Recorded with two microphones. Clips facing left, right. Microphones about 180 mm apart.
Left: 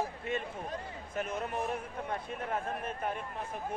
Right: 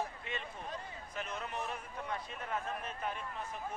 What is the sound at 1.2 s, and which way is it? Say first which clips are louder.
A man's voice: left 6 dB; 50° left (ahead or behind).